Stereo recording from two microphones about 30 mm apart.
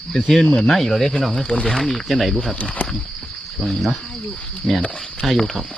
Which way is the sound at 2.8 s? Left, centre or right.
Left.